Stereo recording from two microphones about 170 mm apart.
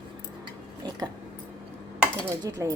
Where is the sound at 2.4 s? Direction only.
20° right (ahead or behind).